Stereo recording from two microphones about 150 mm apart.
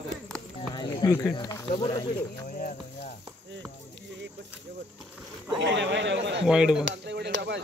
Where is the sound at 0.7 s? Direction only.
30° left (ahead or behind).